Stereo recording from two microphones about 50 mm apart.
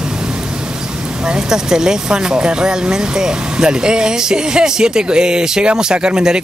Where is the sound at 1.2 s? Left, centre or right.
Centre.